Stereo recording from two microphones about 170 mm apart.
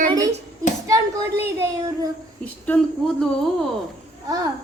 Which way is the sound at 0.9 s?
20° right (ahead or behind).